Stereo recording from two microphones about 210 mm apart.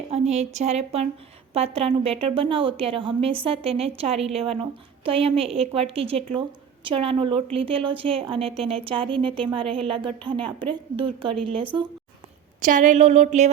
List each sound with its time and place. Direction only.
0.1 s a woman's voice: 30° right (ahead or behind)
12.6 s a woman's voice: 40° right (ahead or behind)